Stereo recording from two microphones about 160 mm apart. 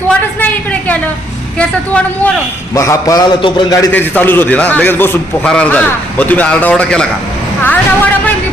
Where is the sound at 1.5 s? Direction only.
10° left (ahead or behind).